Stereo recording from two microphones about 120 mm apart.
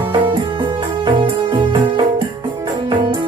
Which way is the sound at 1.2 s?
45° right (ahead or behind).